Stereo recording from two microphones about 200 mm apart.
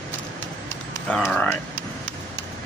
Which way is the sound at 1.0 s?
5° left (ahead or behind).